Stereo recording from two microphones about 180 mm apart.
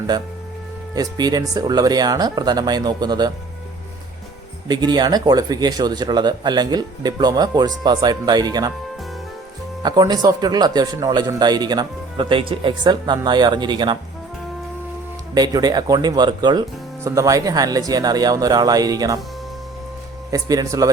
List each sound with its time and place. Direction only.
0.9 s speech: 20° right (ahead or behind)
4.7 s speech: 25° right (ahead or behind)
9.8 s speech: 20° right (ahead or behind)
15.4 s speech: 20° right (ahead or behind)
20.3 s speech: 20° right (ahead or behind)